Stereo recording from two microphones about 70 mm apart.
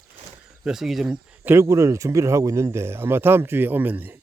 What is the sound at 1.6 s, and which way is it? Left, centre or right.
Speech, right.